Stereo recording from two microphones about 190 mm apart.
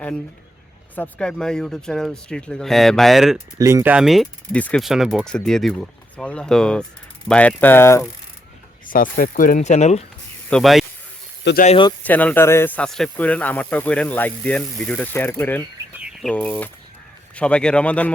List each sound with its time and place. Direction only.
0.9 s speech: 5° left (ahead or behind)
3.6 s speech: 15° right (ahead or behind); by 8.0 s 15° left (ahead or behind)
8.9 s speech: 45° left (ahead or behind)
10.5 s speech: centre (ahead or behind)
11.4 s speech: 65° left (ahead or behind)
12.0 s speech: 10° left (ahead or behind)
16.0 s bird: 5° right (ahead or behind)
16.3 s speech: 5° left (ahead or behind)